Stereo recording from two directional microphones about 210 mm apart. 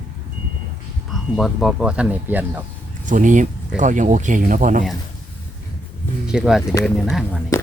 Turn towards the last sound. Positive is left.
turn(degrees=0)  # may be behind; listen again after turning